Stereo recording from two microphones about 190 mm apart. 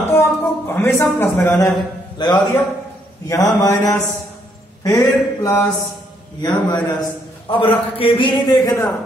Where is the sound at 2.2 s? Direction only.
25° left (ahead or behind).